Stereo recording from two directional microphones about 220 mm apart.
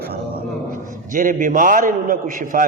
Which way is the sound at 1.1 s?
35° right (ahead or behind).